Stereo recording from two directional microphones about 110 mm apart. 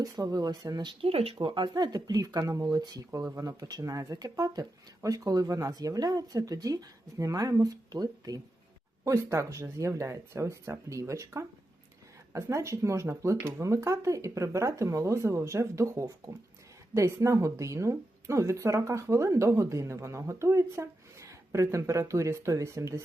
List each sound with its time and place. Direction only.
0.0 s speech: 35° right (ahead or behind)
1.0 s speech: 65° right (ahead or behind); by 23.0 s 30° right (ahead or behind)